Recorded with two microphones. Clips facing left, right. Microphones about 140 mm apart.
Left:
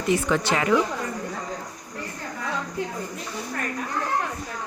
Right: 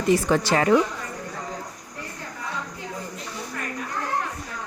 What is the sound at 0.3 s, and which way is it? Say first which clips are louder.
Speech: right 3 dB; 40° right (ahead or behind).